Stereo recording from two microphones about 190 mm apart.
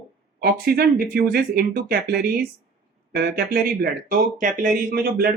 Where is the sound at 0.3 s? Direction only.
55° right (ahead or behind).